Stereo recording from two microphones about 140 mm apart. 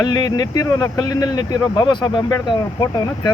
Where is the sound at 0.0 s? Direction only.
30° left (ahead or behind).